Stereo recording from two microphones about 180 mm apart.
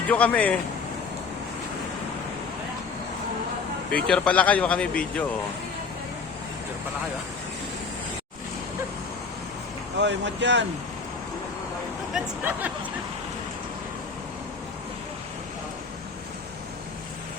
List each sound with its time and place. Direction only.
0.1 s speech: 10° left (ahead or behind)
3.9 s speech: 5° left (ahead or behind)
10.0 s speech: 80° right
12.1 s speech: 5° right (ahead or behind)